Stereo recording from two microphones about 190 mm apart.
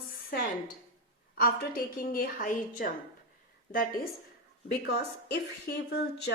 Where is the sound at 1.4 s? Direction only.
50° left (ahead or behind).